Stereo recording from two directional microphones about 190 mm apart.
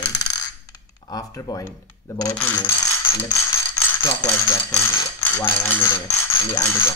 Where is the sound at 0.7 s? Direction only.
20° left (ahead or behind).